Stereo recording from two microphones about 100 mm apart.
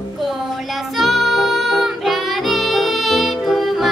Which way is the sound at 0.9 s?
Centre (ahead or behind).